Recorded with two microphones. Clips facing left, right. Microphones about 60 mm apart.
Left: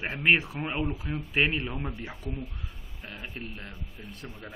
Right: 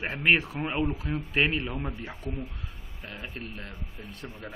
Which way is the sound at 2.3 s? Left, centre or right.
Right.